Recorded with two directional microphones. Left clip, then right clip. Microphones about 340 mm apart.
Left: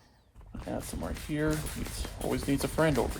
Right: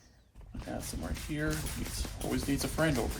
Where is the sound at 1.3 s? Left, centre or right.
Left.